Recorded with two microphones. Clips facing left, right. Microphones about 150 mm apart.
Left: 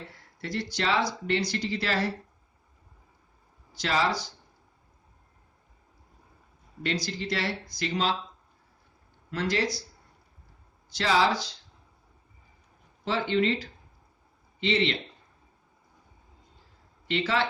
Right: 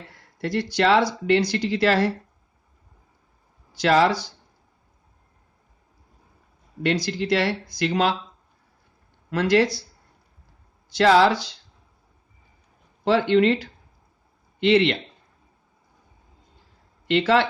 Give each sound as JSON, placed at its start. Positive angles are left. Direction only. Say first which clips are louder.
{"t": 0.4, "sound": "speech", "louder": "right 9 dB", "side_deg": -65}
{"t": 3.8, "sound": "speech", "louder": "right 8 dB", "side_deg": -65}
{"t": 6.8, "sound": "speech", "louder": "right 8 dB", "side_deg": -65}
{"t": 9.3, "sound": "speech", "louder": "right 9 dB", "side_deg": -65}
{"t": 10.9, "sound": "speech", "louder": "right 8 dB", "side_deg": -65}
{"t": 13.1, "sound": "speech", "louder": "right 8 dB", "side_deg": -70}
{"t": 17.1, "sound": "speech", "louder": "right 9 dB", "side_deg": -75}